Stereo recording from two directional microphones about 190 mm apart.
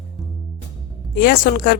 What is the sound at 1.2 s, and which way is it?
Speech, 50° left (ahead or behind).